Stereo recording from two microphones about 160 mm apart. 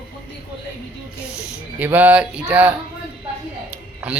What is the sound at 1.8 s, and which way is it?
Speech, 10° right (ahead or behind).